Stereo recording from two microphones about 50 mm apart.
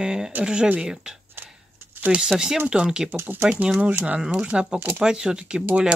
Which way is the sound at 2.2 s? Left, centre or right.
Centre.